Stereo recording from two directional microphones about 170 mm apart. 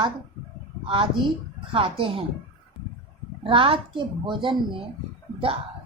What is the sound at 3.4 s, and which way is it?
A woman's voice, 30° right (ahead or behind).